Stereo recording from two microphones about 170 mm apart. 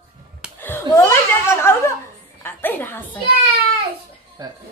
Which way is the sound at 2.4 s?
10° left (ahead or behind).